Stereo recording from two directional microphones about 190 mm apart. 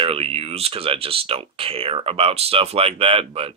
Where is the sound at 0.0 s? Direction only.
30° right (ahead or behind).